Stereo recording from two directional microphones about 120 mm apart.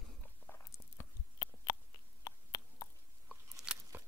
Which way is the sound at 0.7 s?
25° left (ahead or behind).